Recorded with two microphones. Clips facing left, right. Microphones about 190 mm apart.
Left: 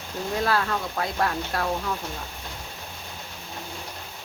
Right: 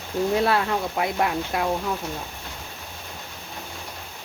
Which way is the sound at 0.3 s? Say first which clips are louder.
Right 1 dB; 20° right (ahead or behind).